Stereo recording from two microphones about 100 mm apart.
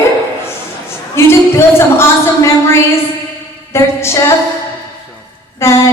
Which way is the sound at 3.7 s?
25° left (ahead or behind).